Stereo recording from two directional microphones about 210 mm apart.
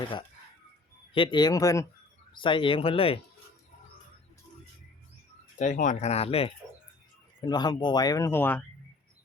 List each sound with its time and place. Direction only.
1.1 s speech: 25° left (ahead or behind)
5.5 s speech: 35° left (ahead or behind); by 8.6 s 10° left (ahead or behind)